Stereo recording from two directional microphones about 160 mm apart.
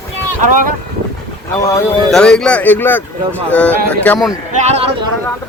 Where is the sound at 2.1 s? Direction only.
5° left (ahead or behind).